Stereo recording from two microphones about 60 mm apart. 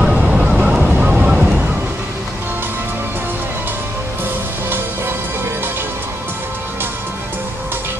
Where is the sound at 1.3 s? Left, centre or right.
Right.